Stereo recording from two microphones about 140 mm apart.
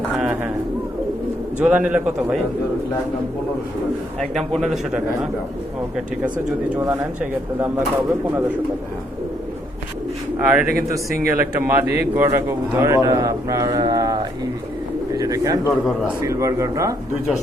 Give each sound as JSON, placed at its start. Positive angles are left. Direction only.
{"t": 0.2, "sound": "bird", "side_deg": -10}
{"t": 1.5, "sound": "speech", "side_deg": -10}
{"t": 4.2, "sound": "a man's voice", "side_deg": 5}
{"t": 6.7, "sound": "speech", "side_deg": -15}
{"t": 10.3, "sound": "a man's voice", "side_deg": -15}
{"t": 15.9, "sound": "a man's voice", "side_deg": 0}
{"t": 16.2, "sound": "a man's voice", "side_deg": -25}